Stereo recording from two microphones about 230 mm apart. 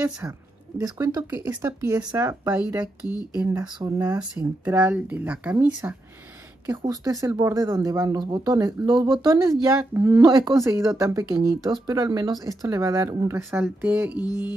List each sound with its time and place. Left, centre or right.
0.7 s speech: centre
3.4 s speech: centre
4.2 s speech: centre
14.1 s music: centre